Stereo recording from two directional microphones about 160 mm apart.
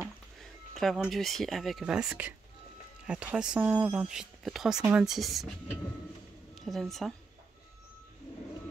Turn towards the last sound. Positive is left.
turn(degrees=0)  # may be behind; listen again after turning